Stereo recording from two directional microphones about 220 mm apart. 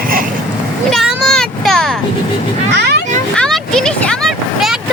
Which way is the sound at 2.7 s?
50° right (ahead or behind).